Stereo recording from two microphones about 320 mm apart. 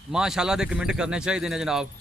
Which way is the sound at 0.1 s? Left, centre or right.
Centre.